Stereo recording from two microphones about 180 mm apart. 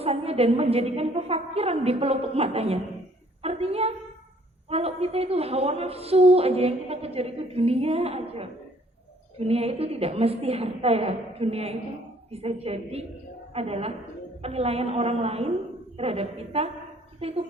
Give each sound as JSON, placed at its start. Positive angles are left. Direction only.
{"t": 0.0, "sound": "a woman's voice", "side_deg": -35}
{"t": 3.4, "sound": "a sound", "side_deg": -35}
{"t": 4.7, "sound": "a woman's voice", "side_deg": -35}